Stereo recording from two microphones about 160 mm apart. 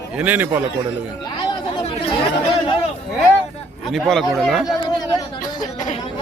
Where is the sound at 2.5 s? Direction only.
40° left (ahead or behind).